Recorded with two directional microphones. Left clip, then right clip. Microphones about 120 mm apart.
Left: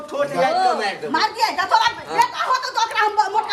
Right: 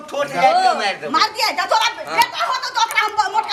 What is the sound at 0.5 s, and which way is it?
Speech, 15° right (ahead or behind).